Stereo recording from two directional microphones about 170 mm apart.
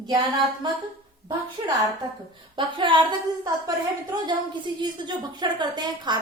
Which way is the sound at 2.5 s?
25° right (ahead or behind).